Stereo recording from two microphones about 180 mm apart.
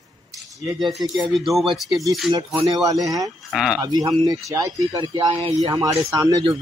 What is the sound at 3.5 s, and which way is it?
Speech, centre (ahead or behind).